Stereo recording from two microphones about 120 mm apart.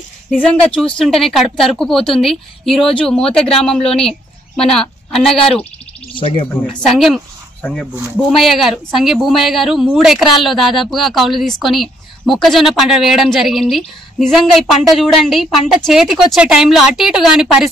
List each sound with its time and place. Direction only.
0.3 s speech: 5° left (ahead or behind)
6.1 s speech: 50° left (ahead or behind)
6.9 s speech: centre (ahead or behind)